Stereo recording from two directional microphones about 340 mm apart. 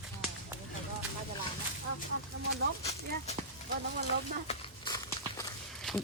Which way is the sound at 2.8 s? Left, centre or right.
Centre.